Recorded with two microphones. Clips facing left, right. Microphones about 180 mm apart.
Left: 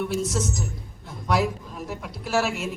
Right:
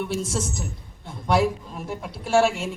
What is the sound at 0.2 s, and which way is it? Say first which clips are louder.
Speech: left 2 dB; 30° right (ahead or behind).